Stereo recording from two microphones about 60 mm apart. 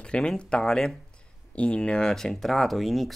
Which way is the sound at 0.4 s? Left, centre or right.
Centre.